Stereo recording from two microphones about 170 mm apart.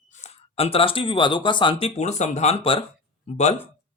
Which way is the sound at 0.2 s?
35° left (ahead or behind).